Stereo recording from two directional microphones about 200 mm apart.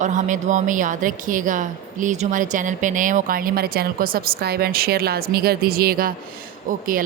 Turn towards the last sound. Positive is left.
turn(degrees=-45)  # may be behind; listen again after turning